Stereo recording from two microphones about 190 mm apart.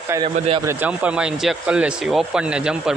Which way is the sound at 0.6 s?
10° right (ahead or behind).